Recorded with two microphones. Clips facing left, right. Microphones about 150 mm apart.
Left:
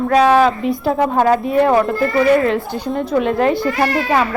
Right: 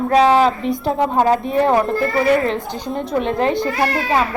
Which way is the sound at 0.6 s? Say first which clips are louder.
Left 2 dB; centre (ahead or behind).